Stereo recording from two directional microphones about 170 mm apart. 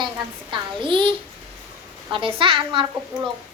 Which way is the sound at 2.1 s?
30° right (ahead or behind).